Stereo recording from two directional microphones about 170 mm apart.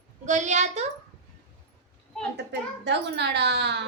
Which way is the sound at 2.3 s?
90° right.